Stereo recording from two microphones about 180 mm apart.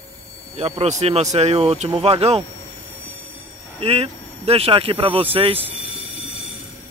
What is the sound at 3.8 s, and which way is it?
Speech, 35° right (ahead or behind).